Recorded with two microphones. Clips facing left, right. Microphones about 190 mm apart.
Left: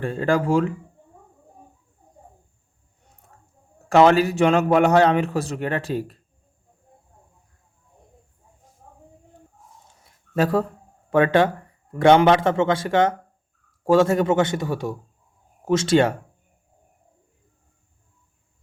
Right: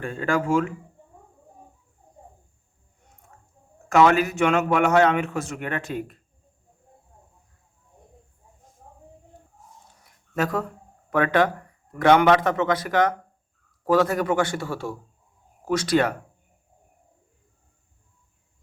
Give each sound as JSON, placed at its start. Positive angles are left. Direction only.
{"t": 0.0, "sound": "a man's voice", "side_deg": 35}
{"t": 3.8, "sound": "a man's voice", "side_deg": 30}
{"t": 10.0, "sound": "a sound", "side_deg": 30}
{"t": 11.1, "sound": "a man's voice", "side_deg": 25}